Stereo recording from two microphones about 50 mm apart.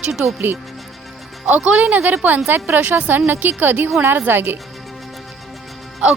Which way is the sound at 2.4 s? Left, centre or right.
Right.